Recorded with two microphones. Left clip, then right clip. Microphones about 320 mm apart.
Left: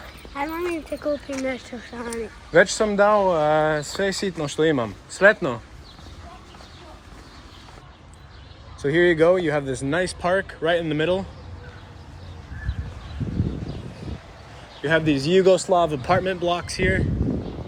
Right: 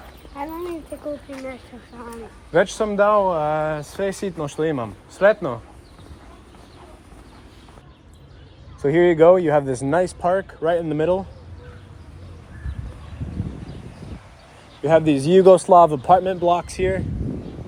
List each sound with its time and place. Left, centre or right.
0.3 s a sound: left
1.3 s speech: centre
2.5 s speech: centre
8.8 s speech: centre
14.8 s speech: centre